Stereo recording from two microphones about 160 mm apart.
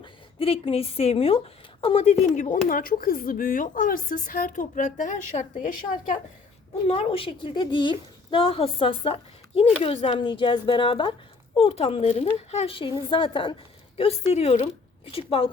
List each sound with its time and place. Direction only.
0.0 s a woman's voice: 35° left (ahead or behind); by 6.1 s 50° left (ahead or behind)
6.8 s speech: 40° left (ahead or behind)